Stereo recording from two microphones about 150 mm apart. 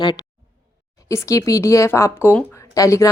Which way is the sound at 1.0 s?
20° left (ahead or behind).